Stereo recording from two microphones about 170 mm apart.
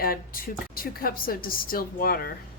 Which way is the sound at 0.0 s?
60° left (ahead or behind).